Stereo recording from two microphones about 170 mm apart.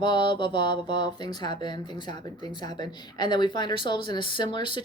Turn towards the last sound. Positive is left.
turn(degrees=30)  # may be behind; listen again after turning